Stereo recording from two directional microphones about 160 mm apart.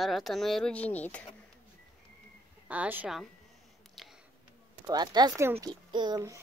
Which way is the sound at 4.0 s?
Centre (ahead or behind).